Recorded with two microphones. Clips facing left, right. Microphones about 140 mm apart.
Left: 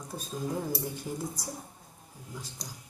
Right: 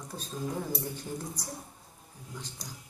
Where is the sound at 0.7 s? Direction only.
10° left (ahead or behind).